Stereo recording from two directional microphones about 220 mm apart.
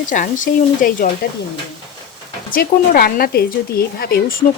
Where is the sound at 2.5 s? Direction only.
40° left (ahead or behind).